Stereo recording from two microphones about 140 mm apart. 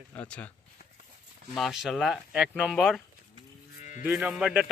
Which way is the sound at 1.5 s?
Centre (ahead or behind).